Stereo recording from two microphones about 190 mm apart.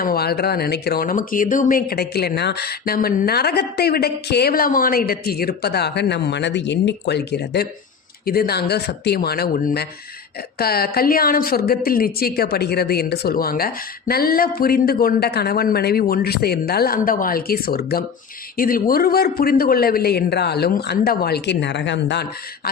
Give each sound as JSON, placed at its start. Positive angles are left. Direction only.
{"t": 0.0, "sound": "a woman's voice", "side_deg": 55}